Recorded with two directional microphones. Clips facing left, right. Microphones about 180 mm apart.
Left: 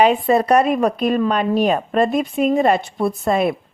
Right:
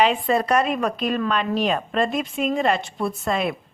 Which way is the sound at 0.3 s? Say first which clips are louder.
Left 5 dB; 35° left (ahead or behind).